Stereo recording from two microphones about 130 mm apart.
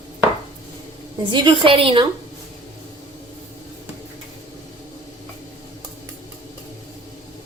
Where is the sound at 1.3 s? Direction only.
35° right (ahead or behind).